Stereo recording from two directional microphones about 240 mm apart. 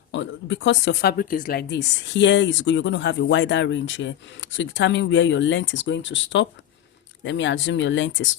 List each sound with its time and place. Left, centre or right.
0.1 s speech: left